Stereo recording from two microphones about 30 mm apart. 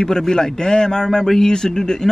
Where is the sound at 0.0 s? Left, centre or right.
Centre.